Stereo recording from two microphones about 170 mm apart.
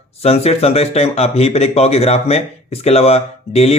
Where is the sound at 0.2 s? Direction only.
35° left (ahead or behind).